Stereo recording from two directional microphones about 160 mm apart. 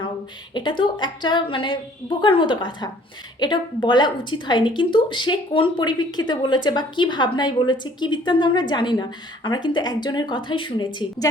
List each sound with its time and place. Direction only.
0.5 s speech: 30° left (ahead or behind)